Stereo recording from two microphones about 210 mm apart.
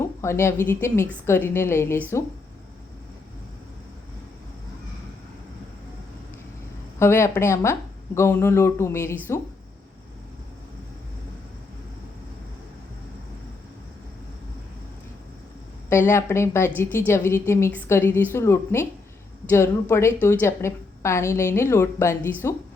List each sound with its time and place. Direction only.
0.2 s speech: 15° left (ahead or behind)
7.0 s speech: 10° left (ahead or behind)
15.9 s speech: 10° left (ahead or behind)